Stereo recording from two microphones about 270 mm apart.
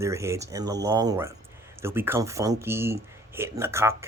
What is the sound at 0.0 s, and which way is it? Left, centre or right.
Speech, centre.